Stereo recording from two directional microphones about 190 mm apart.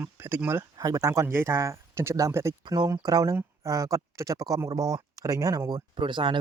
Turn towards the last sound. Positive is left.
turn(degrees=-25)  # may be behind; listen again after turning